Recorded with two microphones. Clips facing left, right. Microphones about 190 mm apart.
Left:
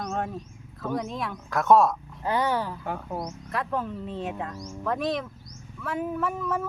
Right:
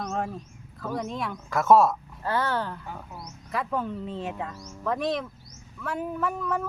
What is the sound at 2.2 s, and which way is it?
Speech, 15° left (ahead or behind).